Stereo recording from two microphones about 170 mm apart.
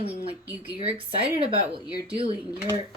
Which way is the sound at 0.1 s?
10° right (ahead or behind).